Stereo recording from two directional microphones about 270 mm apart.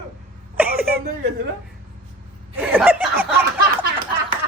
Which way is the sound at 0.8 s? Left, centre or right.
Right.